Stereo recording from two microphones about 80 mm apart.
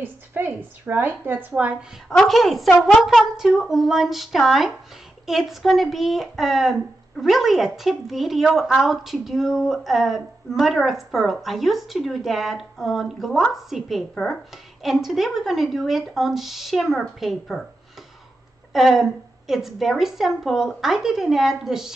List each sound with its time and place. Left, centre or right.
0.0 s a woman's voice: right
1.5 s a woman's voice: centre
2.0 s speech: centre
14.1 s speech: centre
14.8 s speech: centre
18.7 s speech: centre